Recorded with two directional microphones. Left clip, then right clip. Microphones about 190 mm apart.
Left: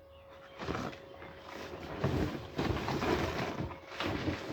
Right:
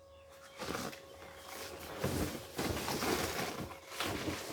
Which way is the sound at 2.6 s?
5° right (ahead or behind).